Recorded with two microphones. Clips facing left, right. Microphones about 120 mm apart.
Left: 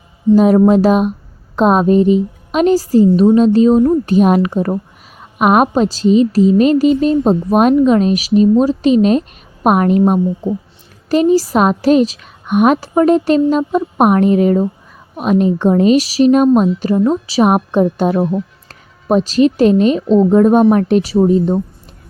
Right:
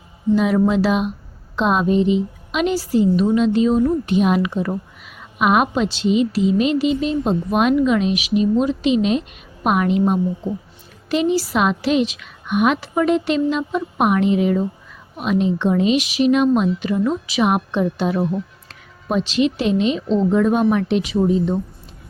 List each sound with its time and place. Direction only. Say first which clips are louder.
0.3 s a woman's voice: left 8 dB; 40° left (ahead or behind)